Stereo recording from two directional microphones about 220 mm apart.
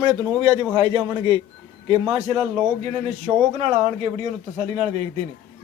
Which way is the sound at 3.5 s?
30° right (ahead or behind).